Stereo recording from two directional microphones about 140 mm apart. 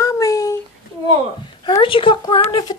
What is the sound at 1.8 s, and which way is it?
Speech, 35° left (ahead or behind).